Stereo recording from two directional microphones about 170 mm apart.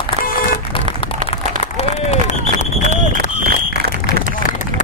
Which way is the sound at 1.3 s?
40° left (ahead or behind).